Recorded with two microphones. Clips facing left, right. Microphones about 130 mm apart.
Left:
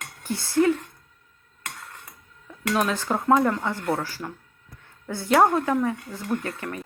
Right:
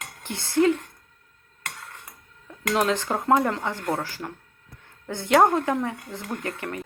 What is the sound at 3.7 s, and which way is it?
Speech, 10° left (ahead or behind).